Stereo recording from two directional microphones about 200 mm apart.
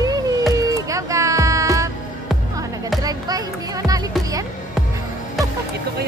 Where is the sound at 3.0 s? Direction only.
20° right (ahead or behind).